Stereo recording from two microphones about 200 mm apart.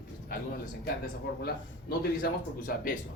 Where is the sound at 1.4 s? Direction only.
50° left (ahead or behind).